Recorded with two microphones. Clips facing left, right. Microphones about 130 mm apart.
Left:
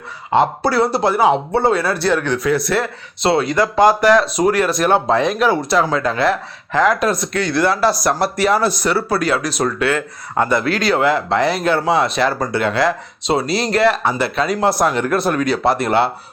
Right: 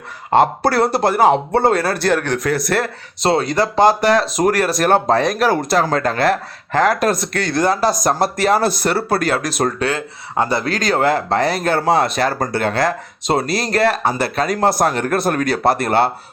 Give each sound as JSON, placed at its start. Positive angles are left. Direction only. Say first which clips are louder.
{"t": 0.3, "sound": "speech", "louder": "right 1 dB", "side_deg": -50}
{"t": 4.4, "sound": "speech", "louder": "even", "side_deg": -40}
{"t": 9.7, "sound": "speech", "louder": "left 2 dB", "side_deg": -35}